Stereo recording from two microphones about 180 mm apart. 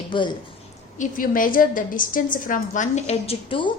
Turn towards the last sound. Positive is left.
turn(degrees=30)  # may be behind; listen again after turning